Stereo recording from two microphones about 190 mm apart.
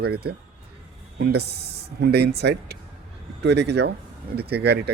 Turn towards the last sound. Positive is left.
turn(degrees=-60)  # may be behind; listen again after turning